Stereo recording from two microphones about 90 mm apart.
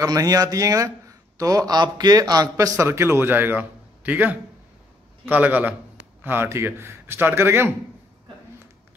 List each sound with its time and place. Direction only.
0.0 s a man's voice: 40° right (ahead or behind)